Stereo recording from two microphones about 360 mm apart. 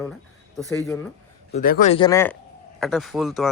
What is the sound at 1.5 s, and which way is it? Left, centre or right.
Speech, left.